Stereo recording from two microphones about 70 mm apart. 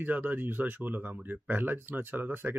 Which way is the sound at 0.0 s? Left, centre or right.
Right.